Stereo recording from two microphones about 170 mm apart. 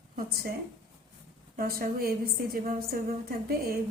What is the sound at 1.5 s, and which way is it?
A woman's voice, 60° right (ahead or behind).